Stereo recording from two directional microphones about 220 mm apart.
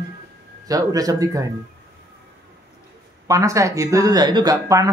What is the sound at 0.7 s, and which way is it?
Speech, 15° right (ahead or behind).